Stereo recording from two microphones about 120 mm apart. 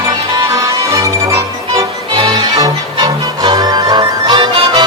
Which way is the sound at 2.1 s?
40° right (ahead or behind).